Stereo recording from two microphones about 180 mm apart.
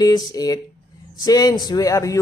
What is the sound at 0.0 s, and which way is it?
Speech, 20° left (ahead or behind).